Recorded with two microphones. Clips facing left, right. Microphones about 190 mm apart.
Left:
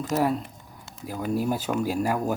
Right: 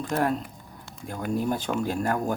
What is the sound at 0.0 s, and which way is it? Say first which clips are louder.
Speech: left 1 dB; 5° left (ahead or behind).